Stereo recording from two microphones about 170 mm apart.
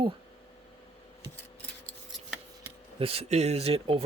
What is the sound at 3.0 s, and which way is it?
Speech, 35° right (ahead or behind).